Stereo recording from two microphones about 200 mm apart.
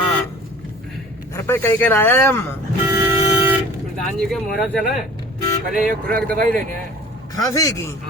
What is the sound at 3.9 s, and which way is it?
Speech, centre (ahead or behind).